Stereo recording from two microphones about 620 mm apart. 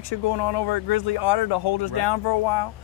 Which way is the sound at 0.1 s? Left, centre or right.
Left.